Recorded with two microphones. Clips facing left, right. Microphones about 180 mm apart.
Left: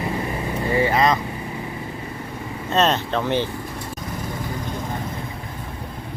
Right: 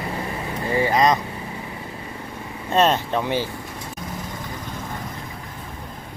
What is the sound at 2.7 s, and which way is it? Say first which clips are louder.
Speech: right 1 dB; 10° right (ahead or behind).